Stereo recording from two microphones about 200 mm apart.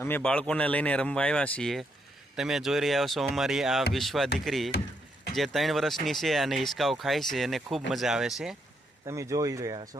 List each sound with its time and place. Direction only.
0.0 s speech: 10° left (ahead or behind)
9.0 s speech: 15° right (ahead or behind)